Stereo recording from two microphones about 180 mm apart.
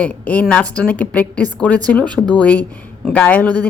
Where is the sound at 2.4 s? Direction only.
10° left (ahead or behind).